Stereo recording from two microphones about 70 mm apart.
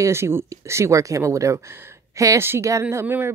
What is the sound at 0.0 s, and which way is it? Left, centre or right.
A woman's voice, right.